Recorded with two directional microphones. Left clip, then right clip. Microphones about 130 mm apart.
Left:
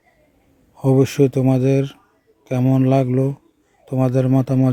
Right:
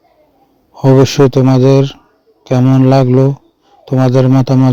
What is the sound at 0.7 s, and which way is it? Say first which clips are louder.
A man's voice: right 8 dB; 45° right (ahead or behind).